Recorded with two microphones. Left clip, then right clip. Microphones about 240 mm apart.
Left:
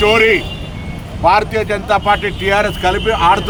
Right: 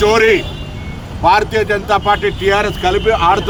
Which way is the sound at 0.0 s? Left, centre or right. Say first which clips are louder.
Even; centre.